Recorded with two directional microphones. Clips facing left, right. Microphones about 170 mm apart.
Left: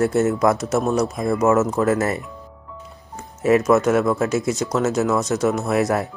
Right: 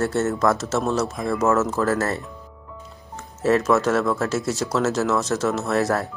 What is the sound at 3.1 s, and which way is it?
Music, 10° left (ahead or behind).